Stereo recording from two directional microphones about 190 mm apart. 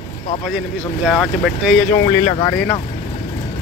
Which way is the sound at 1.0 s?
Centre (ahead or behind).